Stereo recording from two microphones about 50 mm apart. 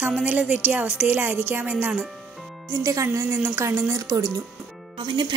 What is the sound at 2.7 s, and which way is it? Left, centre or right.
Speech, right.